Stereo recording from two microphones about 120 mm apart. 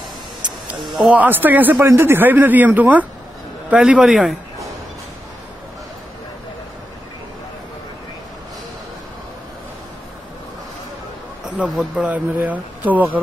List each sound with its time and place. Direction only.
1.0 s a man's voice: 15° right (ahead or behind)
11.4 s a man's voice: 5° right (ahead or behind)